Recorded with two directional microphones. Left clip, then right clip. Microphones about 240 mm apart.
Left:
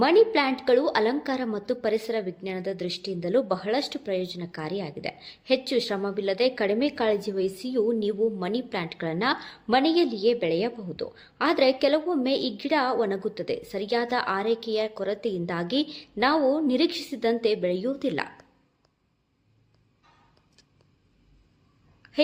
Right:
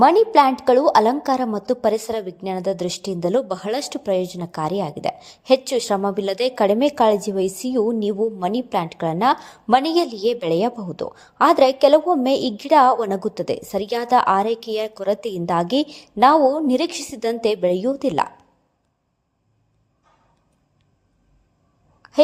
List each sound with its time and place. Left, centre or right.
0.0 s a woman's voice: right
10.7 s speech: centre
11.2 s a woman's voice: right